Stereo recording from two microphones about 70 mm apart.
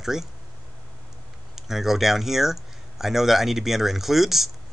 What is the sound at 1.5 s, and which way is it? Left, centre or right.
Speech, centre.